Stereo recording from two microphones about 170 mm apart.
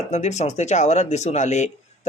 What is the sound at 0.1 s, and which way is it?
Speech, 40° left (ahead or behind).